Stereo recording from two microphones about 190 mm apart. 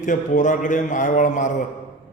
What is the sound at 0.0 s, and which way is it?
A man's voice, 40° left (ahead or behind).